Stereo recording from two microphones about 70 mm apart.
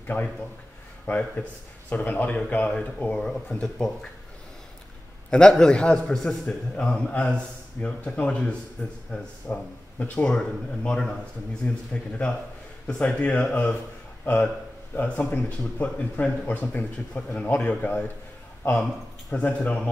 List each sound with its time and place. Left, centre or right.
0.0 s a man's voice: left
2.3 s a man's voice: centre
5.3 s a man's voice: centre
10.2 s a man's voice: centre
19.3 s speech: left